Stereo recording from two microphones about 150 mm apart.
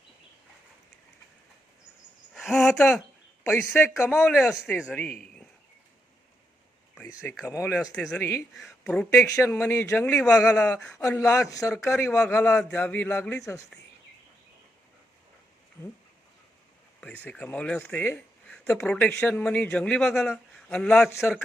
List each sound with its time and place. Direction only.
2.3 s speech: centre (ahead or behind)
4.3 s speech: centre (ahead or behind)
7.4 s speech: 15° left (ahead or behind)
8.5 s speech: 5° left (ahead or behind)
11.4 s speech: 25° left (ahead or behind)
17.2 s speech: 10° left (ahead or behind)